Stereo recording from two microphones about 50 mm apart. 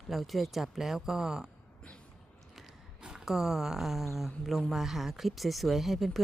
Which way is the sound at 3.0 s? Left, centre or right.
Centre.